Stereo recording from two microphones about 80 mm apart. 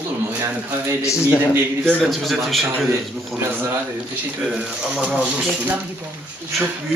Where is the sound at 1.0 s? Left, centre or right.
Left.